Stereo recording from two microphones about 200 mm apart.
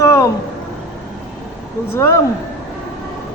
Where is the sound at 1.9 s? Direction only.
10° left (ahead or behind).